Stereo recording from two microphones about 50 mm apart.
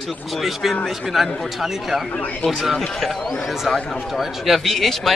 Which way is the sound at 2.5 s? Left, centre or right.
Centre.